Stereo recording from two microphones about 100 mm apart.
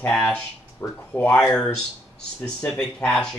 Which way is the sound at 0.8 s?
25° left (ahead or behind).